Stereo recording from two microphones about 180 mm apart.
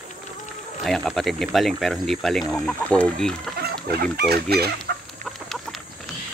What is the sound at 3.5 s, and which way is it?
Chicken, 60° right (ahead or behind).